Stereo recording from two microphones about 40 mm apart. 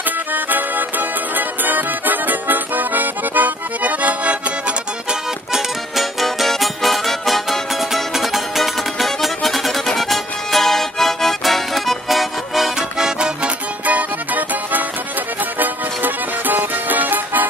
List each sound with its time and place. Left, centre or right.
0.3 s music: right
5.5 s music: centre
12.7 s music: centre
13.8 s music: right